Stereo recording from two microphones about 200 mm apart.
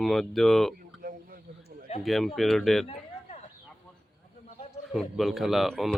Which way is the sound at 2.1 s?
Centre (ahead or behind).